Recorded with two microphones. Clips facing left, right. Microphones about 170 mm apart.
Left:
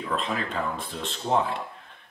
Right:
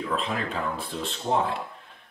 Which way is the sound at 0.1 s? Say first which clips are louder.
Left 2 dB; centre (ahead or behind).